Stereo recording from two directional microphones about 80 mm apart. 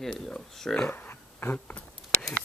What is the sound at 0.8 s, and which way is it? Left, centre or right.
Dog, left.